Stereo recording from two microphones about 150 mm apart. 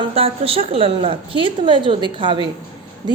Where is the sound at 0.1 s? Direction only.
40° right (ahead or behind).